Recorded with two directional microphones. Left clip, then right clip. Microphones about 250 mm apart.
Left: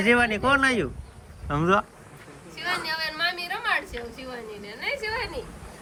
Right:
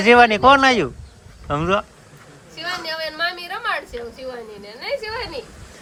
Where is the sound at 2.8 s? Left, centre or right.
Right.